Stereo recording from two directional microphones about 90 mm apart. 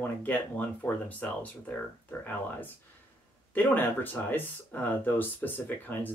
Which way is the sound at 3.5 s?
20° left (ahead or behind).